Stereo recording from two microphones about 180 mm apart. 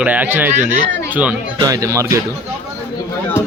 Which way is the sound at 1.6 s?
20° right (ahead or behind).